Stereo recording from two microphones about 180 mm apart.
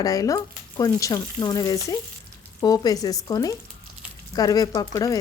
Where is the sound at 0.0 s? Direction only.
20° left (ahead or behind).